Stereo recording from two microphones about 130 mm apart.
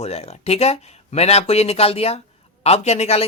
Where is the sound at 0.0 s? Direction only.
55° left (ahead or behind).